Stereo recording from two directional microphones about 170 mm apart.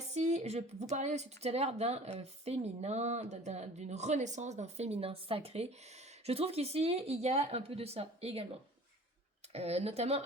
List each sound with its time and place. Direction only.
0.1 s speech: 40° right (ahead or behind)
9.5 s speech: 35° right (ahead or behind)